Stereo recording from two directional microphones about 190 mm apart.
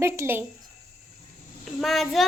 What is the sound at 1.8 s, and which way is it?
Speech, centre (ahead or behind).